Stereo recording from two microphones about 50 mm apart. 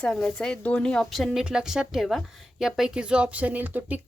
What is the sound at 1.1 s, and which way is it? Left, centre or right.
Speech, centre.